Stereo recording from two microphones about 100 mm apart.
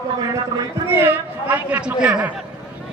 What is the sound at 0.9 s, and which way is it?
Speech, 20° right (ahead or behind).